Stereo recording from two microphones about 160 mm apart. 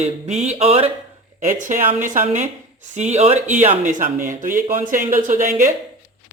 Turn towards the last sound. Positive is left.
turn(degrees=-55)  # may be behind; listen again after turning